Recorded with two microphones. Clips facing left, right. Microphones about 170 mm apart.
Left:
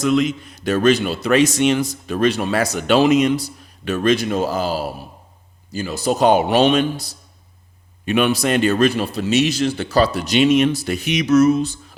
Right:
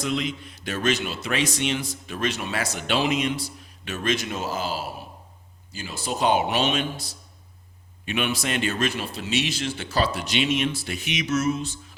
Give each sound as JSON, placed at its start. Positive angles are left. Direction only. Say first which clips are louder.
{"t": 0.0, "sound": "a man's voice", "louder": "left 10 dB", "side_deg": 45}